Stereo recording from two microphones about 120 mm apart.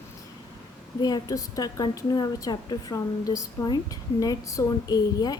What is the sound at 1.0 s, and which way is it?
A woman's voice, 30° left (ahead or behind).